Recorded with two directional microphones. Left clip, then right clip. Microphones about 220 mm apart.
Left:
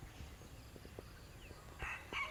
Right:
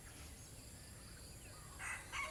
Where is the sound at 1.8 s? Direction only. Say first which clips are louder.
Left 2 dB; 20° right (ahead or behind).